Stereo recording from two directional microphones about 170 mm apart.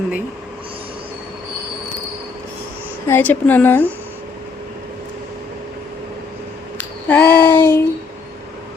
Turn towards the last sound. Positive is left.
turn(degrees=10)  # may be behind; listen again after turning